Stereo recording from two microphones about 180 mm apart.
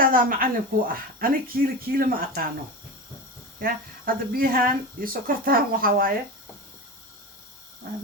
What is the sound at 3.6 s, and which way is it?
Speech, 55° right (ahead or behind).